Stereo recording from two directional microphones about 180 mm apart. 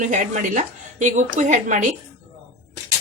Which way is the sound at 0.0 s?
45° right (ahead or behind).